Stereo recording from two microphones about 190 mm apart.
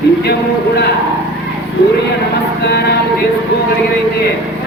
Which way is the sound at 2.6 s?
60° left (ahead or behind).